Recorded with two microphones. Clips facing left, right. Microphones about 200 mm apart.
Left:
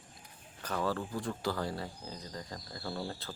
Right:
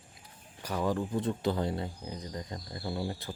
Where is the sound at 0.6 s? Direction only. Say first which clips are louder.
Right 3 dB; 15° right (ahead or behind).